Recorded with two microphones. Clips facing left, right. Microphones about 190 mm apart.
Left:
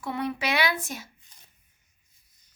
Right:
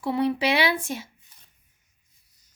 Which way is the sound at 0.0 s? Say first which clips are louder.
Right 6 dB; 30° right (ahead or behind).